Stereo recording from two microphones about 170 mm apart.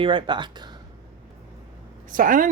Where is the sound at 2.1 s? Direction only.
55° right (ahead or behind).